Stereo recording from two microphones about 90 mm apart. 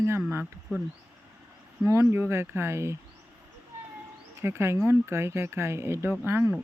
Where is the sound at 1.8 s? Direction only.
30° right (ahead or behind).